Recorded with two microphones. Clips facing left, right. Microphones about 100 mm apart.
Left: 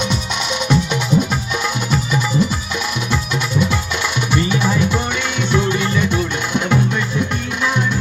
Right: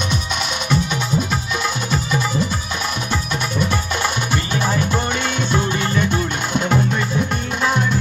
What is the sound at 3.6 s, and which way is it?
Music, 45° right (ahead or behind).